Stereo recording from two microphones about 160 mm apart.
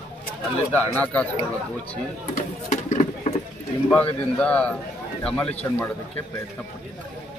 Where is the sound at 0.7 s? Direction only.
10° left (ahead or behind).